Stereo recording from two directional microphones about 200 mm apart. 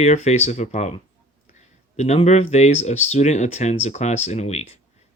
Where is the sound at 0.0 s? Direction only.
35° left (ahead or behind).